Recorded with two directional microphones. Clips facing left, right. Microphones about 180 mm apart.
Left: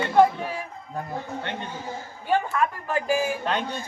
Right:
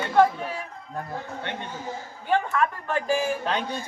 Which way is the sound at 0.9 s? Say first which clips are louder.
Left 2 dB; 5° left (ahead or behind).